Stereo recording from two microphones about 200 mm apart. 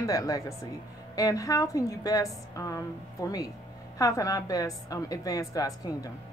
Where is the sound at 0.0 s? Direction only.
15° left (ahead or behind).